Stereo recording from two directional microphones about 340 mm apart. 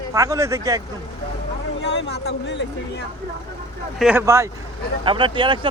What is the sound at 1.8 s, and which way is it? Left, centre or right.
Speech, left.